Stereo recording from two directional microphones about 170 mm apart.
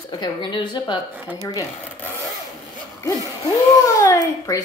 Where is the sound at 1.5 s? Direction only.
20° left (ahead or behind).